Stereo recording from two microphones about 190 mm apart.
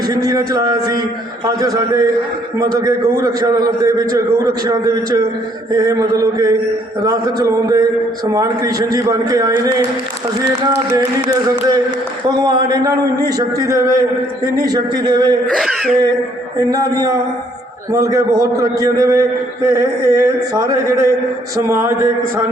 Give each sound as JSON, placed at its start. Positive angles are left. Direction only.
{"t": 0.1, "sound": "a man's voice", "side_deg": -20}
{"t": 10.9, "sound": "a sound", "side_deg": -20}
{"t": 14.6, "sound": "a man's voice", "side_deg": -20}
{"t": 15.4, "sound": "throat clearing", "side_deg": 0}
{"t": 16.6, "sound": "a man's voice", "side_deg": -20}
{"t": 17.9, "sound": "a sound", "side_deg": -15}